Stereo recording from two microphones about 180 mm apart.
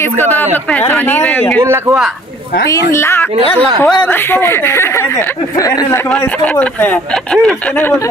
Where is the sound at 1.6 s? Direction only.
15° right (ahead or behind).